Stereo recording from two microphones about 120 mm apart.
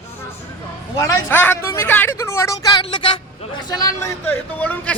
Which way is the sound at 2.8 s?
45° left (ahead or behind).